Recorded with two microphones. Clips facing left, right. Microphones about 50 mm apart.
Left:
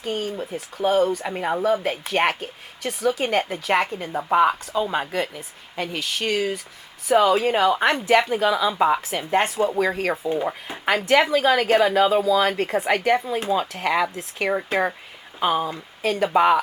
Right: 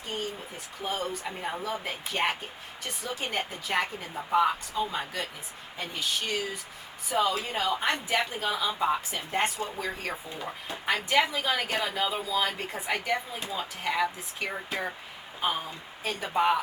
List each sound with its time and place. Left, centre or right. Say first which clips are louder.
0.0 s speech: left 8 dB; left
1.8 s speech: left 8 dB; left
4.9 s speech: left 9 dB; left
5.7 s a woman's voice: left 5 dB; left
11.7 s speech: left 12 dB; left